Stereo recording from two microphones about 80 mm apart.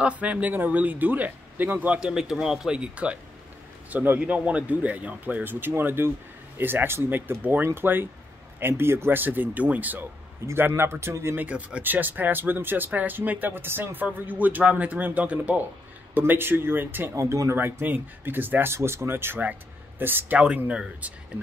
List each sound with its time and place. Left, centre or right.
0.0 s speech: centre
2.0 s speech: centre
10.4 s a man's voice: right
11.4 s speech: centre
17.1 s speech: right
20.3 s speech: centre